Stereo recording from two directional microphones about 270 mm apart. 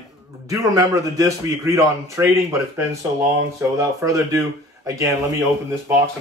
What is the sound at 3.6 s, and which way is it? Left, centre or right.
Speech, centre.